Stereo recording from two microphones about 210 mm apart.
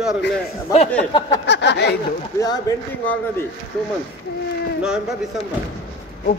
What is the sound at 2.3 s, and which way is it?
Speech, 15° left (ahead or behind).